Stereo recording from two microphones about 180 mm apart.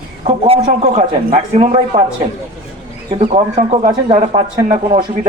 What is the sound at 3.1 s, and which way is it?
Speech, 35° right (ahead or behind).